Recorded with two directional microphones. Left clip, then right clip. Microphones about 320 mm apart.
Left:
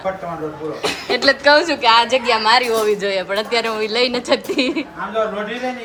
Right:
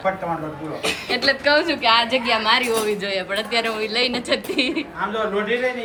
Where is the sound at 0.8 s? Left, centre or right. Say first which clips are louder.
Left 2 dB; left.